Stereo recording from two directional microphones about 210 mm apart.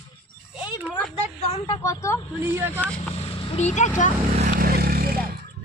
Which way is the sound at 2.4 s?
10° right (ahead or behind).